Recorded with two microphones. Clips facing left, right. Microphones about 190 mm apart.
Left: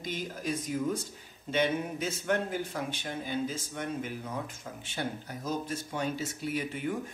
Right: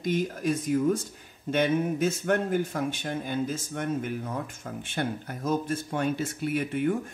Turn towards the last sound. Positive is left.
turn(degrees=-55)  # may be behind; listen again after turning